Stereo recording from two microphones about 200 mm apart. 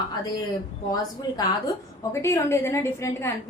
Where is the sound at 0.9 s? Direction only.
20° left (ahead or behind).